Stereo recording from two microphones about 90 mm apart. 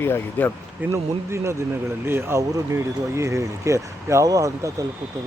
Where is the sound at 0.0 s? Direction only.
25° left (ahead or behind).